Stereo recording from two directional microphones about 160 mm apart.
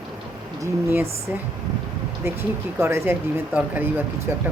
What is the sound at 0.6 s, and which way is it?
Speech, 15° right (ahead or behind).